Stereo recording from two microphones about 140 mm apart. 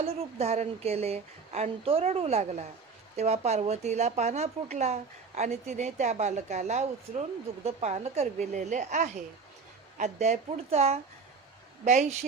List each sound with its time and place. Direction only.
0.0 s speech: 50° right (ahead or behind)
11.9 s a woman's voice: 60° right (ahead or behind)